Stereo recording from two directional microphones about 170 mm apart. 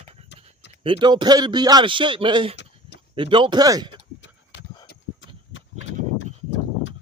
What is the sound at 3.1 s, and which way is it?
Speech, 30° right (ahead or behind).